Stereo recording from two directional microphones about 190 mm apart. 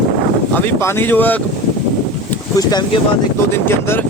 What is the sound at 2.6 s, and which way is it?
Speech, 20° left (ahead or behind).